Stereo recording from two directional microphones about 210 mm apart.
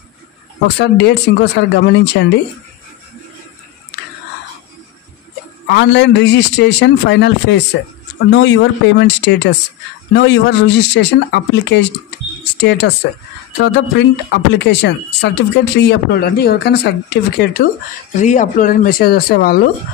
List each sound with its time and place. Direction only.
0.7 s speech: 55° left (ahead or behind)
5.7 s speech: 55° left (ahead or behind)
18.2 s speech: 35° left (ahead or behind)